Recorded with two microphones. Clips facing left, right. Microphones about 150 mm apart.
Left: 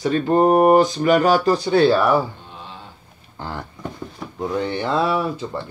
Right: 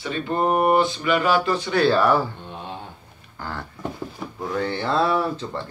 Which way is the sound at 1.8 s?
15° left (ahead or behind).